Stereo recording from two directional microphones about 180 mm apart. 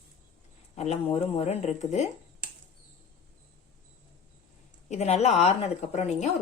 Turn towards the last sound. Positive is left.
turn(degrees=40)  # may be behind; listen again after turning